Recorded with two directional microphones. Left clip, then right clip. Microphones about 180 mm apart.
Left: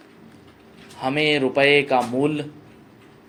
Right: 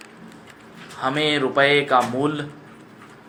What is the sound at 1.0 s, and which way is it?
A man's voice, 40° left (ahead or behind).